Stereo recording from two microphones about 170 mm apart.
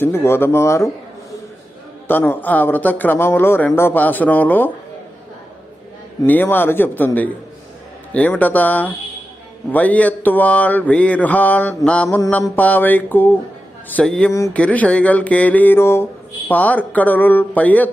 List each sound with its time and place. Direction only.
0.0 s mantra: 15° left (ahead or behind)
2.0 s mantra: 10° left (ahead or behind)
6.2 s mantra: 10° left (ahead or behind)
13.9 s speech: 5° left (ahead or behind)
14.3 s mantra: 20° left (ahead or behind)
14.6 s mantra: 5° left (ahead or behind)